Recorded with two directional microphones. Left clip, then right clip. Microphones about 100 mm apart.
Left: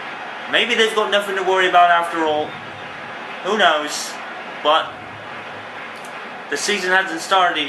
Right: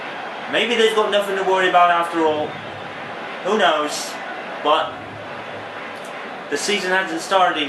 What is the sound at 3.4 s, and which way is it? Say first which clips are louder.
Speech: left 1 dB; 20° left (ahead or behind).